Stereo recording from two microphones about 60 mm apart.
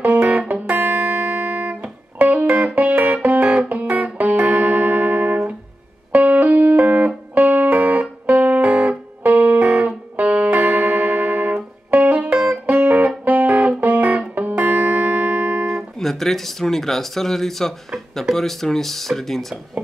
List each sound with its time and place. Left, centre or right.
0.3 s music: right
15.6 s speech: centre